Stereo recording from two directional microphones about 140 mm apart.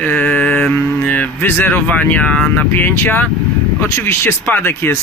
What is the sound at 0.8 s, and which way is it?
Speech, 15° left (ahead or behind).